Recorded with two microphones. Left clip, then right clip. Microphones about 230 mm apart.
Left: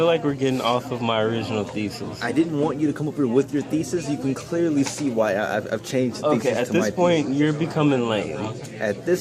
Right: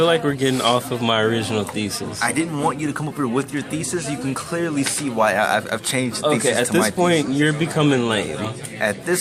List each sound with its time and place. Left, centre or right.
0.0 s speech: right
2.2 s speech: right
6.4 s speech: right
8.8 s speech: centre